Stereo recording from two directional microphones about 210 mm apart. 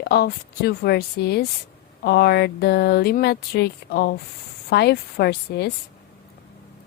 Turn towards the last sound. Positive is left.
turn(degrees=50)  # may be behind; listen again after turning